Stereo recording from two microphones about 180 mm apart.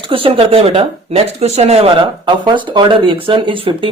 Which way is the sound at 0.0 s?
30° right (ahead or behind).